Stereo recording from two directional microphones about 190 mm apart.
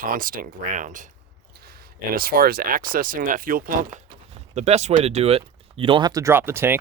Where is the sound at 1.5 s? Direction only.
55° right (ahead or behind).